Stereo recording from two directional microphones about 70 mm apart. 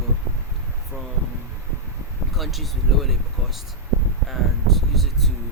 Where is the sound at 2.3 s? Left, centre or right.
Centre.